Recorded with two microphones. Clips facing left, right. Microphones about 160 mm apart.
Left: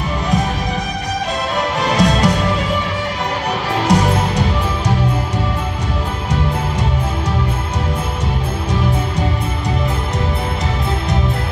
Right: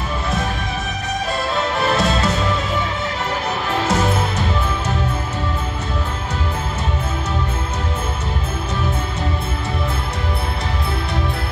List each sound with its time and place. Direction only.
1.8 s music: 15° left (ahead or behind)
3.8 s music: 15° left (ahead or behind)